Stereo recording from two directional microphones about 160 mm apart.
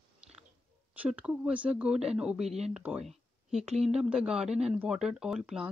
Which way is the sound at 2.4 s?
40° right (ahead or behind).